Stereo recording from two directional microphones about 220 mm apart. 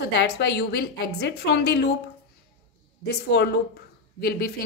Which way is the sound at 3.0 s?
50° left (ahead or behind).